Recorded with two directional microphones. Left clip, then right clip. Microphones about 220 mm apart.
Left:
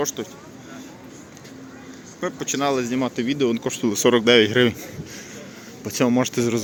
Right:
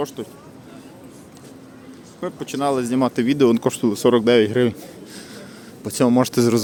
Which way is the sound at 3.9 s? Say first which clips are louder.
Even; 15° right (ahead or behind).